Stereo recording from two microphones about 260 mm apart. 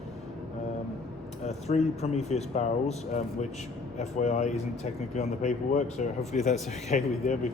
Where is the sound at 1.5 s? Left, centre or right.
Left.